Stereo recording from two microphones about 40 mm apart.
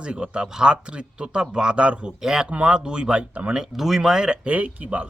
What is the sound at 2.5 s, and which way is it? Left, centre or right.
Speech, right.